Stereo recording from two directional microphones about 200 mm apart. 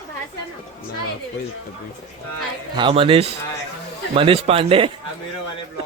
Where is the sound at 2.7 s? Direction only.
25° right (ahead or behind).